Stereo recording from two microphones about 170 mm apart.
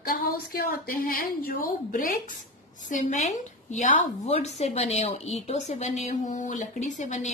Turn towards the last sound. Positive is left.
turn(degrees=45)  # may be behind; listen again after turning